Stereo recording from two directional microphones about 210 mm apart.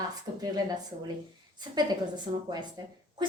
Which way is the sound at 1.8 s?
20° right (ahead or behind).